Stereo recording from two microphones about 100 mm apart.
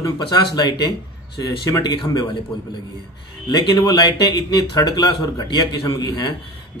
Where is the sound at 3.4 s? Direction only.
45° left (ahead or behind).